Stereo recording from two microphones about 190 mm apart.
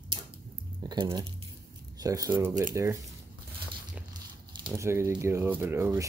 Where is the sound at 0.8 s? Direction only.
25° right (ahead or behind).